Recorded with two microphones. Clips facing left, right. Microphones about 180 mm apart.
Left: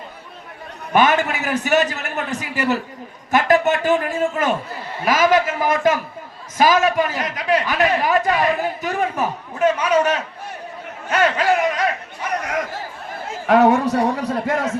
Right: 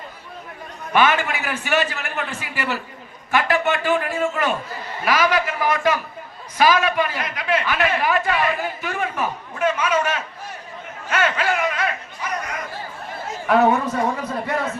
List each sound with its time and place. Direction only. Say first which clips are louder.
0.9 s a man's voice: left 2 dB; 40° left (ahead or behind)
12.4 s chatter: left 6 dB; 90° left
13.5 s a woman's voice: left 3 dB; 85° left